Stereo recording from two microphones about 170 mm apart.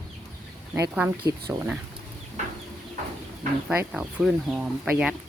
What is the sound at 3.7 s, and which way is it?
Speech, 5° right (ahead or behind).